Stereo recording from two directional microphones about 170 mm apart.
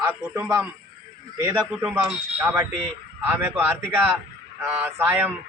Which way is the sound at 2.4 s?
15° right (ahead or behind).